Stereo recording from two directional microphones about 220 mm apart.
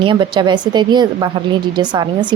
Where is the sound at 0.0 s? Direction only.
20° right (ahead or behind).